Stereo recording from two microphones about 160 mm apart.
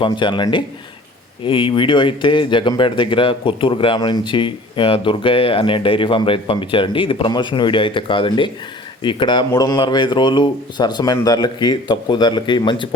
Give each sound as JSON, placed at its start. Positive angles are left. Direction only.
{"t": 0.0, "sound": "speech", "side_deg": 30}